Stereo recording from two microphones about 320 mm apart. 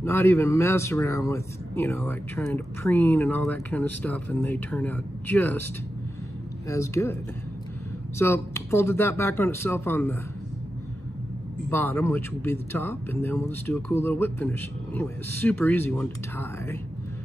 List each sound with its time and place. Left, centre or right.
0.0 s speech: centre
6.7 s speech: centre
8.2 s speech: centre
11.7 s speech: centre